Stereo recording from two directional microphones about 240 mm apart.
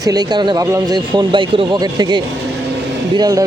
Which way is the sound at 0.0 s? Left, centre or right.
Centre.